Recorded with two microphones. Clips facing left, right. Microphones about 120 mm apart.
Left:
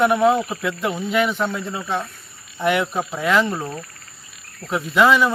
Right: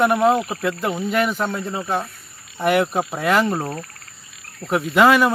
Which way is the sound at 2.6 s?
5° right (ahead or behind).